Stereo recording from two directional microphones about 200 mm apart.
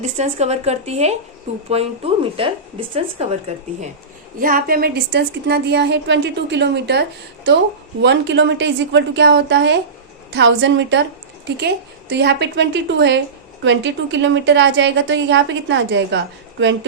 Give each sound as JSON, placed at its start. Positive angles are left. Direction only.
{"t": 0.0, "sound": "a woman's voice", "side_deg": -35}
{"t": 4.4, "sound": "a woman's voice", "side_deg": -45}
{"t": 8.0, "sound": "a woman's voice", "side_deg": -60}